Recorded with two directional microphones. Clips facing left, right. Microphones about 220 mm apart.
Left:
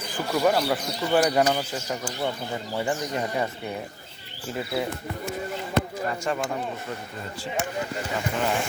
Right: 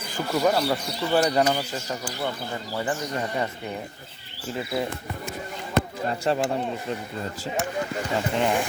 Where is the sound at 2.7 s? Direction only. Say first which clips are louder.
Left 1 dB; 15° left (ahead or behind).